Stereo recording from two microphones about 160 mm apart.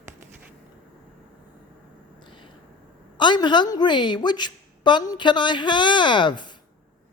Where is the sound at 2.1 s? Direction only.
30° left (ahead or behind).